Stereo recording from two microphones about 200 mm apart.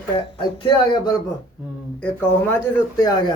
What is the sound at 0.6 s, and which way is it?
Speech, 25° left (ahead or behind).